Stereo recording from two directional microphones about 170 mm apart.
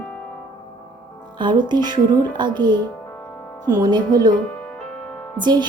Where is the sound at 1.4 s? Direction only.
25° right (ahead or behind).